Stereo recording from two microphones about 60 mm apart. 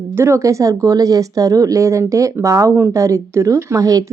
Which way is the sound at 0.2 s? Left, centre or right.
Right.